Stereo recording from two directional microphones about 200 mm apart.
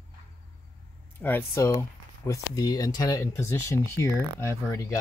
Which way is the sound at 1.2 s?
10° left (ahead or behind).